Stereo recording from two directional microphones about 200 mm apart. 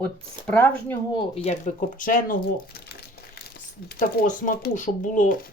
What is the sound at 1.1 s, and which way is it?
Speech, 30° left (ahead or behind).